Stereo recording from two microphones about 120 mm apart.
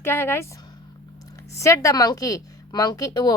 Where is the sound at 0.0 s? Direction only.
20° left (ahead or behind).